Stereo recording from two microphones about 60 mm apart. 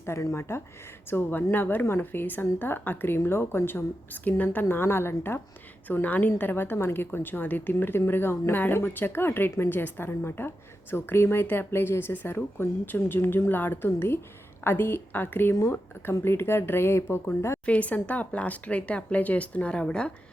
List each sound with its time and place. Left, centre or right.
0.0 s speech: left
1.1 s a woman's voice: left
4.7 s a woman's voice: left
5.9 s a woman's voice: left
17.7 s speech: left